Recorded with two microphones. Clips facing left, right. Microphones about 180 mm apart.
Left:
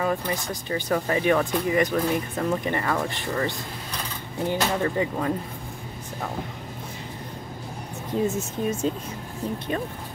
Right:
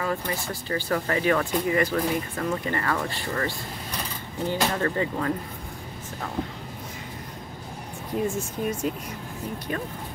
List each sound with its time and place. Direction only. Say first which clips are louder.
0.0 s speech: left 3 dB; 20° left (ahead or behind)
8.1 s speech: left 2 dB; 20° left (ahead or behind)